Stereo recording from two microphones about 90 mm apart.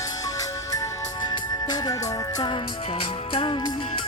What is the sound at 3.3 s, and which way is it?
Music, 75° left (ahead or behind).